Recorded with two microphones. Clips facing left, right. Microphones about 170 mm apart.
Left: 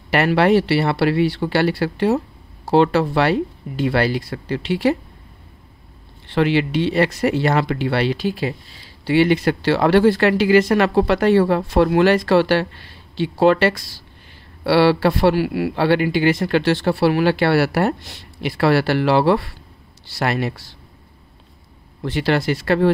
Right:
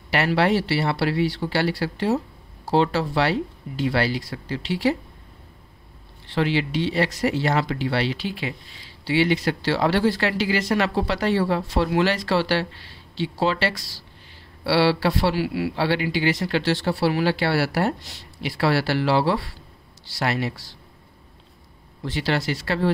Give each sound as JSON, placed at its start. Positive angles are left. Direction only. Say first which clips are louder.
{"t": 0.1, "sound": "speech", "louder": "left 5 dB", "side_deg": 55}
{"t": 6.2, "sound": "speech", "louder": "left 5 dB", "side_deg": 60}
{"t": 22.0, "sound": "speech", "louder": "left 5 dB", "side_deg": 55}